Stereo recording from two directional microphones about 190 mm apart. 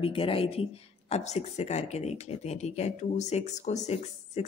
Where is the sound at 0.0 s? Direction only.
30° left (ahead or behind).